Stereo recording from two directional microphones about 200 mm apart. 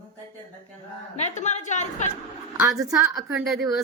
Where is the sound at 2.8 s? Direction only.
15° right (ahead or behind).